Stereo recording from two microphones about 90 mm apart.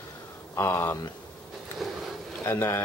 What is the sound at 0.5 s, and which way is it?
Speech, 30° left (ahead or behind).